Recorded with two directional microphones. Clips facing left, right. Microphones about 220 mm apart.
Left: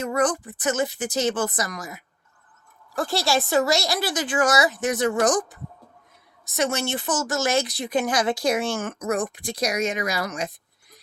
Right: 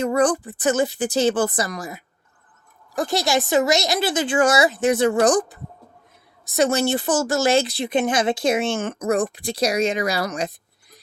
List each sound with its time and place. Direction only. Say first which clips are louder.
0.0 s speech: right 4 dB; 30° right (ahead or behind)
2.9 s a woman's voice: right 2 dB; 20° right (ahead or behind); by 10.5 s 35° right (ahead or behind)